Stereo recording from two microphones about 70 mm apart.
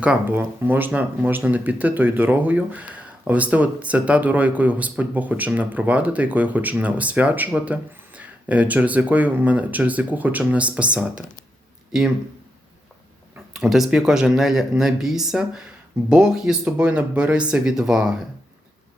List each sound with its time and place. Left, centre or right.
0.3 s speech: right; by 12.1 s centre
13.5 s speech: centre